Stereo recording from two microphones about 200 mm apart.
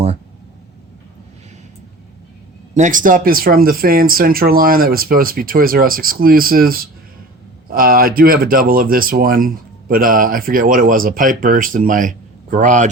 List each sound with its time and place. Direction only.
2.7 s speech: 40° right (ahead or behind)